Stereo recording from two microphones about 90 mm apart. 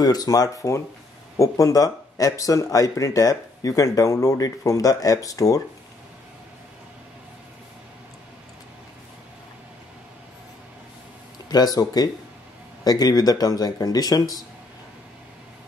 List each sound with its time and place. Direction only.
0.0 s speech: 45° left (ahead or behind)
11.4 s speech: 45° left (ahead or behind)